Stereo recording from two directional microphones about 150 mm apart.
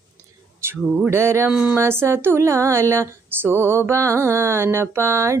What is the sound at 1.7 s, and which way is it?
Speech, 15° right (ahead or behind).